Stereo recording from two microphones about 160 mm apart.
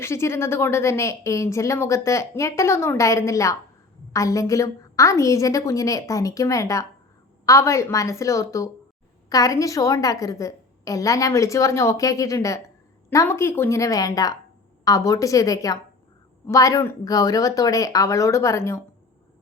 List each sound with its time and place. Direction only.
0.0 s a woman's voice: 15° left (ahead or behind)